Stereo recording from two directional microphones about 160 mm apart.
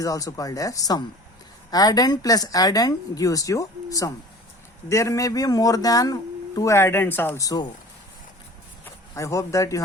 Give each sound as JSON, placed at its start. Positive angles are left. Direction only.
{"t": 0.0, "sound": "speech", "side_deg": 20}
{"t": 8.8, "sound": "speech", "side_deg": 20}